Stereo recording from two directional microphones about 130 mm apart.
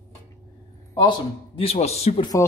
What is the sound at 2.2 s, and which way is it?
Speech, 25° left (ahead or behind).